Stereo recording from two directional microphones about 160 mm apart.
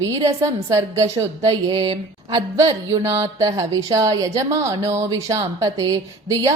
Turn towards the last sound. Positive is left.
turn(degrees=-20)  # may be behind; listen again after turning